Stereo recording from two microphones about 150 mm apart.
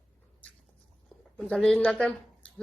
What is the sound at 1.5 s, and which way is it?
Speech, 10° left (ahead or behind).